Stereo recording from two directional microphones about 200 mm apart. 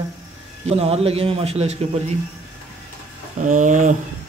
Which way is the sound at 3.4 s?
40° right (ahead or behind).